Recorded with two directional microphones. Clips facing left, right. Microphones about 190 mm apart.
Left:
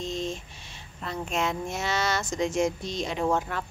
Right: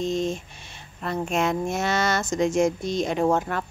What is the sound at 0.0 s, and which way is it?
Speech, 50° right (ahead or behind).